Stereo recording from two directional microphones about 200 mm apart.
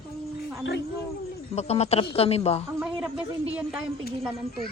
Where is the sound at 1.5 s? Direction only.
30° left (ahead or behind).